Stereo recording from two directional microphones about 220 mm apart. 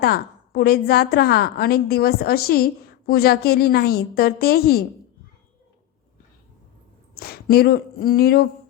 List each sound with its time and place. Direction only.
0.0 s a woman's voice: 45° left (ahead or behind)
7.2 s a woman's voice: 45° left (ahead or behind)